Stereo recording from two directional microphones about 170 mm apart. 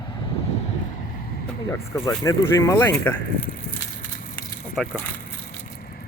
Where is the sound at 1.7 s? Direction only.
15° left (ahead or behind).